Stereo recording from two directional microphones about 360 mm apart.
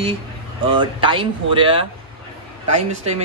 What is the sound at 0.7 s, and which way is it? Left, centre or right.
Speech, centre.